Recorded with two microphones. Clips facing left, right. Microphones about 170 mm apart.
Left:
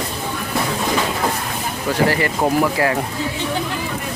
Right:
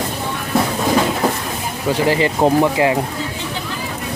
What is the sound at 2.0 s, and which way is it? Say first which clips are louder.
Speech: right 7 dB; 20° right (ahead or behind).